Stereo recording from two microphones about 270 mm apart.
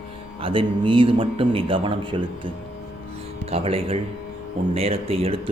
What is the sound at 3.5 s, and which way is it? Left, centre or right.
Speech, right.